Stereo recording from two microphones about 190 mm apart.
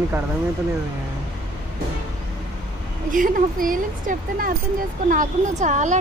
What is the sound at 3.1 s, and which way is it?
Speech, 45° right (ahead or behind).